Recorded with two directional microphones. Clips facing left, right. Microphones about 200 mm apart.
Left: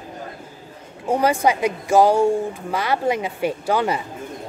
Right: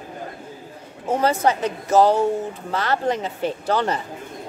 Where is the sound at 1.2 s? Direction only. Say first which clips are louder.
Left 1 dB; 10° left (ahead or behind).